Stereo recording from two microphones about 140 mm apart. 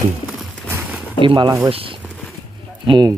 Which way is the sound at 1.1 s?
35° right (ahead or behind).